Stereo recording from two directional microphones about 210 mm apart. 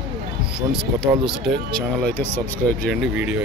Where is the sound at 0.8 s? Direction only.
55° right (ahead or behind).